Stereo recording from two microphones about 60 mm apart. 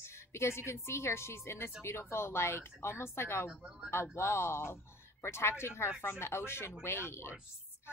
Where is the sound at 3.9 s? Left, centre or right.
Left.